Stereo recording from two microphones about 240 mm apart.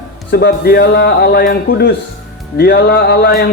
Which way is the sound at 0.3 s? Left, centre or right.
Left.